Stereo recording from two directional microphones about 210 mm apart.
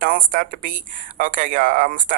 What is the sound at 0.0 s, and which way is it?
A man's voice, 40° right (ahead or behind).